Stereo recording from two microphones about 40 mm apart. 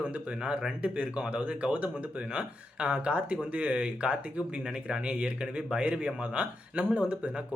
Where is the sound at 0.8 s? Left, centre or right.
Right.